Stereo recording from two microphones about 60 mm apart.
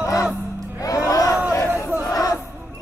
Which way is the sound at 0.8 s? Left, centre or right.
Left.